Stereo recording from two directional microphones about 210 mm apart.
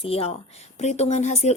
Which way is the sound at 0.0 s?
30° left (ahead or behind).